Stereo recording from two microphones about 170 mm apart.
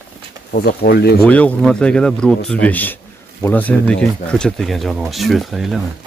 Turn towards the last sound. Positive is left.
turn(degrees=0)  # may be behind; listen again after turning